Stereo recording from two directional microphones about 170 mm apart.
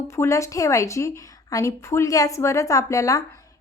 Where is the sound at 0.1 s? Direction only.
15° left (ahead or behind).